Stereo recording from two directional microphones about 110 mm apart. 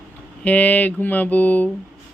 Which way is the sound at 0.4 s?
15° left (ahead or behind).